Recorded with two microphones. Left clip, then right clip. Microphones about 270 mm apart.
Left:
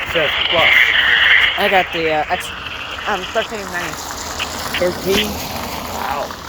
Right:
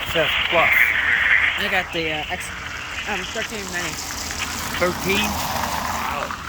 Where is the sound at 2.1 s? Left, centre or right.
Centre.